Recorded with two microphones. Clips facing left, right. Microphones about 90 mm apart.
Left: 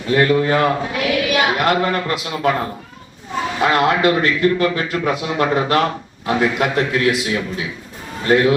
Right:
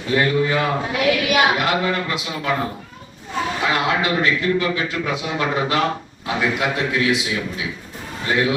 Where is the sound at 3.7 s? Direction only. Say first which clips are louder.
Left 6 dB; 50° left (ahead or behind).